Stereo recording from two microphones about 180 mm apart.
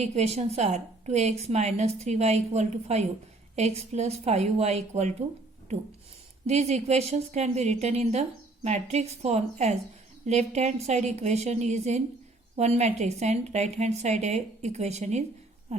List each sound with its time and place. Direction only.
0.0 s a woman's voice: 35° right (ahead or behind)
6.5 s a woman's voice: 35° right (ahead or behind)